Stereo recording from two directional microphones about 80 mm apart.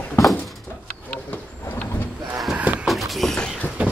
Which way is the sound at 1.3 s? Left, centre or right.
Left.